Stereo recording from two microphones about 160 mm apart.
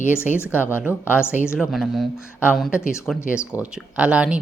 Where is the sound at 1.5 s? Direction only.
Centre (ahead or behind).